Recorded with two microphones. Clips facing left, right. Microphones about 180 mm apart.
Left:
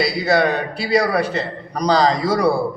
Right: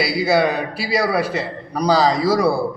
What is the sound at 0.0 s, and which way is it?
A man's voice, 5° right (ahead or behind).